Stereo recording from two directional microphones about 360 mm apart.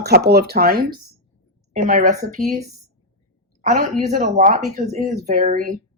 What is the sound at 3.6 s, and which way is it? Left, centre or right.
Speech, centre.